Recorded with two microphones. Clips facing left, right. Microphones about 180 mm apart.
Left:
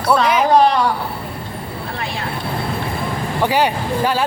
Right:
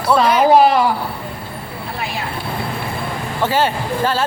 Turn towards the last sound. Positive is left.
turn(degrees=15)  # may be behind; listen again after turning